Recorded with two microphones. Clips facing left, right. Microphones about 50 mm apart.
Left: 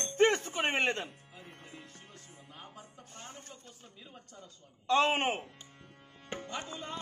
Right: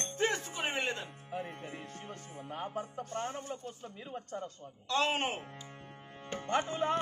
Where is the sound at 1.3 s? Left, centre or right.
Right.